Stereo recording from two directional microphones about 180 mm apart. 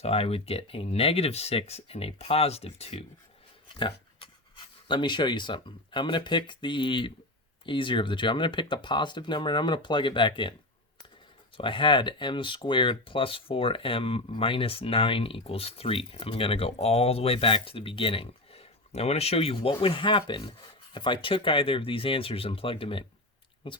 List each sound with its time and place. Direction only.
0.0 s speech: 35° left (ahead or behind)
11.5 s speech: 30° left (ahead or behind)